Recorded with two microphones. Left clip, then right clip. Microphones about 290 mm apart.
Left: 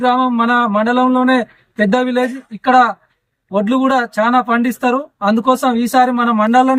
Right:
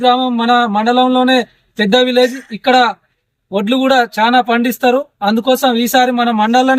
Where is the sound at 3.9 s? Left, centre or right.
Left.